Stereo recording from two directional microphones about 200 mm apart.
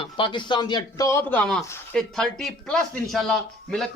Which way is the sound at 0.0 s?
25° left (ahead or behind).